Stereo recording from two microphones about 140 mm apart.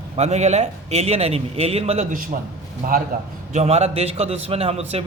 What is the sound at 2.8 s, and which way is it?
Speech, 90° right.